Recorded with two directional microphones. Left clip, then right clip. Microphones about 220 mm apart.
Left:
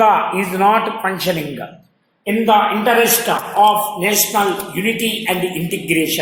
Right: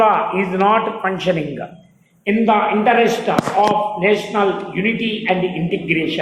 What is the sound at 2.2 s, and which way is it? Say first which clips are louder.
Speech: left 2 dB; 45° left (ahead or behind).